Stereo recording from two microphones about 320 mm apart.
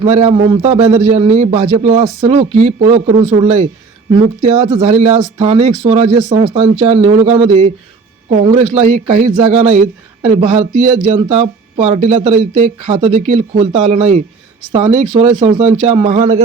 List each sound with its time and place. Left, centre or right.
0.0 s speech: right